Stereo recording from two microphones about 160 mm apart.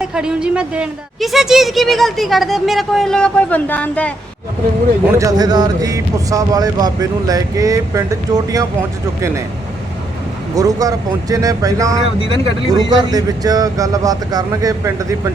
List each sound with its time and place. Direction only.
0.0 s a woman's voice: 5° right (ahead or behind)
5.1 s speech: 20° right (ahead or behind)
10.5 s speech: 20° right (ahead or behind)